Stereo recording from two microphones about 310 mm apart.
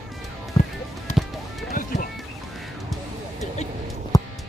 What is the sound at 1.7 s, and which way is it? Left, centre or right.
Music, left.